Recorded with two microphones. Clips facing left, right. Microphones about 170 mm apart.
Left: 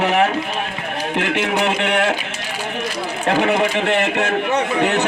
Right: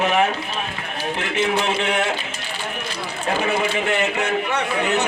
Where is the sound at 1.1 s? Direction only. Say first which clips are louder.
Left 2 dB; 75° left (ahead or behind).